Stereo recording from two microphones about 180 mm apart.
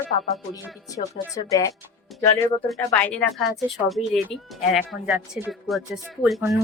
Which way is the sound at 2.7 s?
5° left (ahead or behind).